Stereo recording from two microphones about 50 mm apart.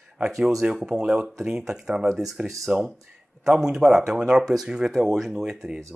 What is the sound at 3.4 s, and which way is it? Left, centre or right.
Speech, centre.